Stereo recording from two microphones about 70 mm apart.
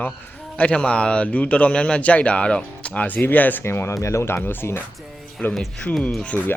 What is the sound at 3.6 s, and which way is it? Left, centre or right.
Speech, left.